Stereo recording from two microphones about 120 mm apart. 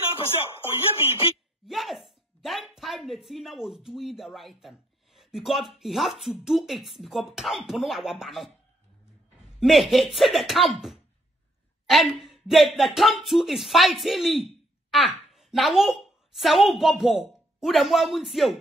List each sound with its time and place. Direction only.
0.7 s speech: 20° right (ahead or behind)
1.7 s speech: centre (ahead or behind)
9.6 s speech: centre (ahead or behind)